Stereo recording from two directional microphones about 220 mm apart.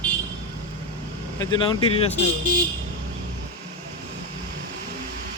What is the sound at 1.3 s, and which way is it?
Speech, 20° left (ahead or behind).